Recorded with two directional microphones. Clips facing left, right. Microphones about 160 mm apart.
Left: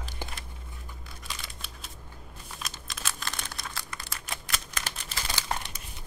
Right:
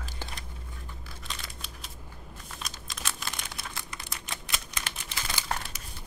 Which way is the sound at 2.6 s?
Centre (ahead or behind).